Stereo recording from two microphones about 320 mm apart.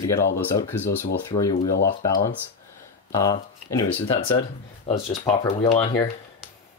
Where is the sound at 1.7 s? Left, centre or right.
Left.